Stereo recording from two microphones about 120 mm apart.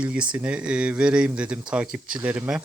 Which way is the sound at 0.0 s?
10° right (ahead or behind).